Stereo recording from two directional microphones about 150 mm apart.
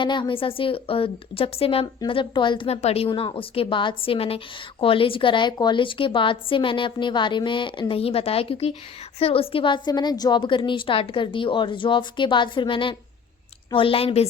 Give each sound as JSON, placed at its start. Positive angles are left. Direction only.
{"t": 0.0, "sound": "a woman's voice", "side_deg": 30}